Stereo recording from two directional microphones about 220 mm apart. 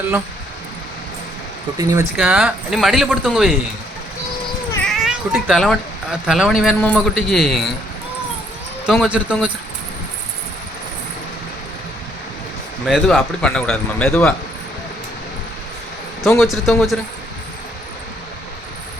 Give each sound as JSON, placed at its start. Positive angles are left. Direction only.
{"t": 1.8, "sound": "speech", "side_deg": -15}
{"t": 2.1, "sound": "a man's voice", "side_deg": -5}
{"t": 4.7, "sound": "a man's voice", "side_deg": 5}
{"t": 8.9, "sound": "a man's voice", "side_deg": -5}
{"t": 12.8, "sound": "a man's voice", "side_deg": 0}
{"t": 16.2, "sound": "a man's voice", "side_deg": 0}